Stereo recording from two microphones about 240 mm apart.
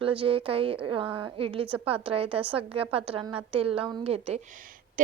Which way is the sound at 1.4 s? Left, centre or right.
Right.